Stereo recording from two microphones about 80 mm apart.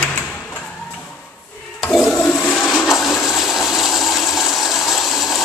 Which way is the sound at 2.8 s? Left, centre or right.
Centre.